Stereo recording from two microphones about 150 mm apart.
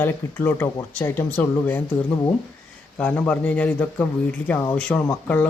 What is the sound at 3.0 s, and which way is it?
Speech, 10° left (ahead or behind).